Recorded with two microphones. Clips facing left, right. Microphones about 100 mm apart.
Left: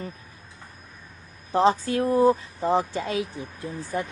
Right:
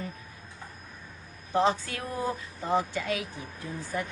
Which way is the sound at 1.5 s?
35° left (ahead or behind).